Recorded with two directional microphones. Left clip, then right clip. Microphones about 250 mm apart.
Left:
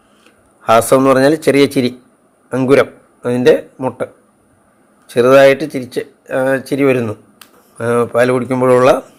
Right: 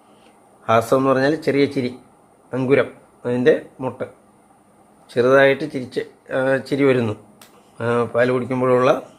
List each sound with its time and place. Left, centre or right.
0.6 s speech: centre